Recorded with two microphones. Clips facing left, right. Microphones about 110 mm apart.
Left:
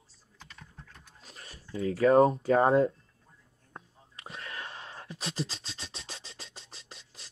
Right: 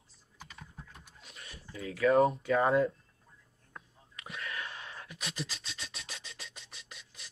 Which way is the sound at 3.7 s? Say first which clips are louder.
Left 2 dB; 30° left (ahead or behind).